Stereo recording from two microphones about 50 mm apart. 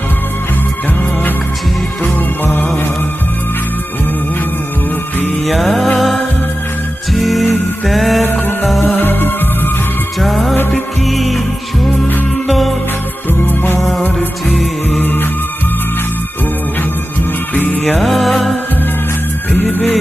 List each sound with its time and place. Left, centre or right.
2.4 s music: left
5.5 s music: centre
8.9 s music: left
10.2 s music: centre
12.5 s music: centre
13.4 s music: left
15.0 s music: left
17.5 s music: left
17.8 s music: centre
19.7 s music: left